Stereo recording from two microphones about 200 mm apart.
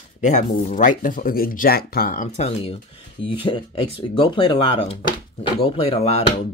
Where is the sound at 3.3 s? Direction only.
25° left (ahead or behind).